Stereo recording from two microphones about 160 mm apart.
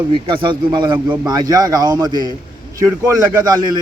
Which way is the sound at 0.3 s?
30° right (ahead or behind).